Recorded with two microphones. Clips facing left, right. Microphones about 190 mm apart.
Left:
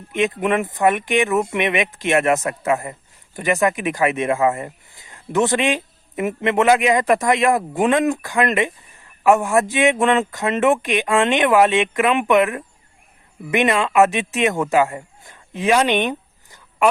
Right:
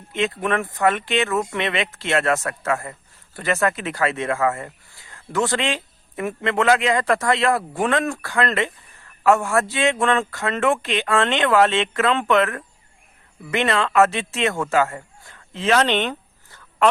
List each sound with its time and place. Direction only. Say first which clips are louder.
0.1 s speech: left 3 dB; 15° left (ahead or behind)